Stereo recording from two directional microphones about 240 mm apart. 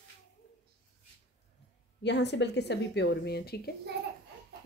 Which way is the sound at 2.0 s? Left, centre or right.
Left.